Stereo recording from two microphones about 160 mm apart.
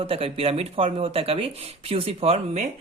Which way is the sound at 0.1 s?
40° right (ahead or behind).